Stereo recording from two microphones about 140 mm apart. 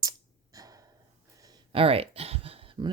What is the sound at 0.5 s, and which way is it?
Gasp, 25° right (ahead or behind).